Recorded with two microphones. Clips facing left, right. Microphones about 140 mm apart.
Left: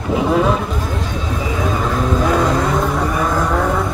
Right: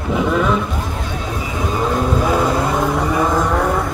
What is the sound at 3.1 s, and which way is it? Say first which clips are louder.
Vehicle: right 2 dB; 20° right (ahead or behind).